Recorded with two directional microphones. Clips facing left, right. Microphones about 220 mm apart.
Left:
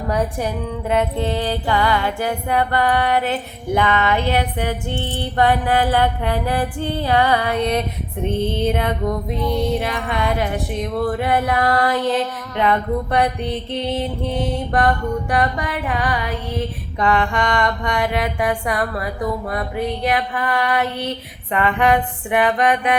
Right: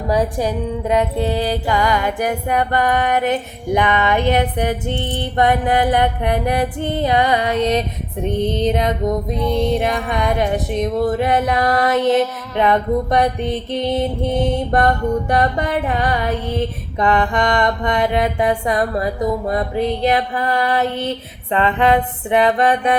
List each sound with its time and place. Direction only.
0.1 s music: 15° right (ahead or behind)
15.4 s music: 25° right (ahead or behind)
17.0 s music: 20° right (ahead or behind)